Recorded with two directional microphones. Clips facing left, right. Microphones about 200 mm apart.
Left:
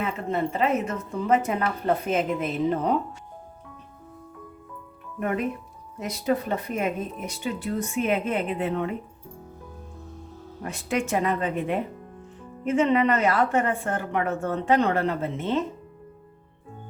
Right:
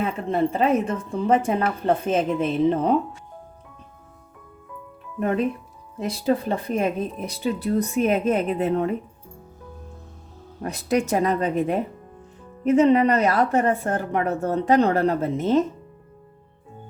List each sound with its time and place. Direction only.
0.3 s a woman's voice: 30° right (ahead or behind)
6.0 s a woman's voice: 30° right (ahead or behind)
10.6 s a woman's voice: 40° right (ahead or behind)